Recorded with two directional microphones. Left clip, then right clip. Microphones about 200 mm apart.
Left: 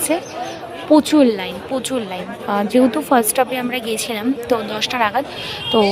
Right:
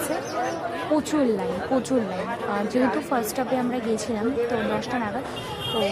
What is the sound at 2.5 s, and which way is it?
A woman's voice, 30° left (ahead or behind).